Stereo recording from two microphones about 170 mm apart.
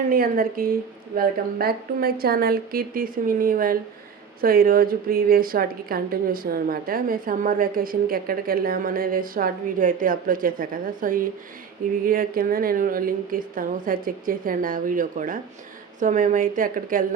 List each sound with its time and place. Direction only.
0.1 s a woman's voice: 55° right (ahead or behind)